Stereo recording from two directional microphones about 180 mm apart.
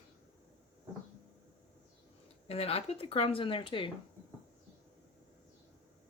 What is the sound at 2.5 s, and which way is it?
Speech, 35° left (ahead or behind).